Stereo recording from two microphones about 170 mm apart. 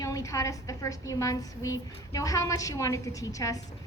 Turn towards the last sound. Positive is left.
turn(degrees=20)  # may be behind; listen again after turning